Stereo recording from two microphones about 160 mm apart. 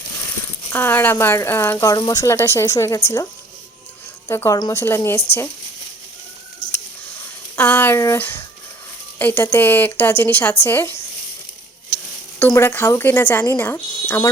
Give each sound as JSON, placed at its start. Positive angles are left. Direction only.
{"t": 0.7, "sound": "a woman's voice", "side_deg": 15}
{"t": 4.3, "sound": "a woman's voice", "side_deg": 20}
{"t": 7.5, "sound": "a woman's voice", "side_deg": 10}
{"t": 12.4, "sound": "a woman's voice", "side_deg": 15}